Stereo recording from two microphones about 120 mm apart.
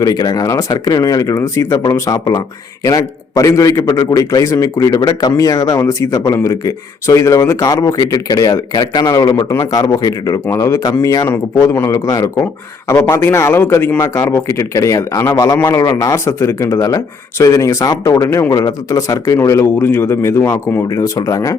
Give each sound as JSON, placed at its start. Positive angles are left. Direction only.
{"t": 0.0, "sound": "a man's voice", "side_deg": 35}